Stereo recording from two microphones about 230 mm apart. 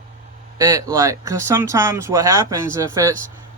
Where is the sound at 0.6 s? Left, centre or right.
Centre.